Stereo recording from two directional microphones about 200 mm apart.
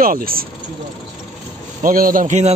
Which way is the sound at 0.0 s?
45° right (ahead or behind).